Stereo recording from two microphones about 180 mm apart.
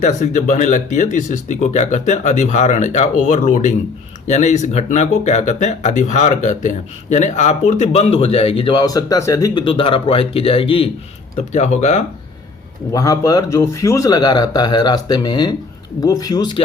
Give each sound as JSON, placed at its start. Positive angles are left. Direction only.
{"t": 0.0, "sound": "speech", "side_deg": 45}
{"t": 12.9, "sound": "speech", "side_deg": 20}